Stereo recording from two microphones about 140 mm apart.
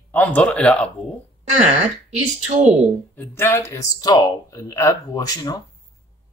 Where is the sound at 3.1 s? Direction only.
15° left (ahead or behind).